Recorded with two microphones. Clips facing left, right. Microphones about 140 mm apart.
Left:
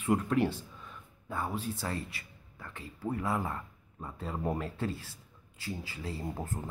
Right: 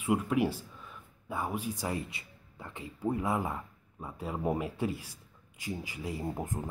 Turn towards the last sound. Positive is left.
turn(degrees=-15)  # may be behind; listen again after turning